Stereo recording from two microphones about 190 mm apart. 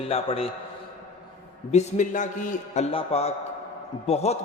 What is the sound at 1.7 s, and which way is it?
A man's voice, 40° left (ahead or behind).